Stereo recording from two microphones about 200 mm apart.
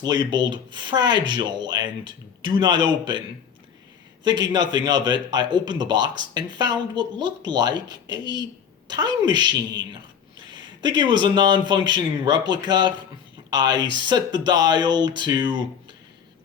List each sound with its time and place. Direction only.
0.0 s a man's voice: 20° right (ahead or behind)
4.2 s a man's voice: 20° right (ahead or behind)